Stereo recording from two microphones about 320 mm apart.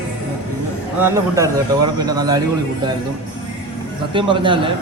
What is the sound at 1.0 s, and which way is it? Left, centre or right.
A man's voice, centre.